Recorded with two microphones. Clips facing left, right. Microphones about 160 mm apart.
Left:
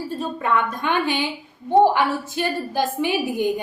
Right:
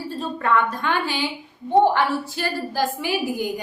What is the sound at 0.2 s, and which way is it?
A woman's voice, 15° left (ahead or behind).